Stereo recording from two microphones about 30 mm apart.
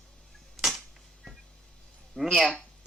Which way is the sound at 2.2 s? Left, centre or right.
Left.